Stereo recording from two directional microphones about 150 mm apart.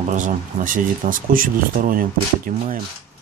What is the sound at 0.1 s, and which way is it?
Speech, 60° right (ahead or behind).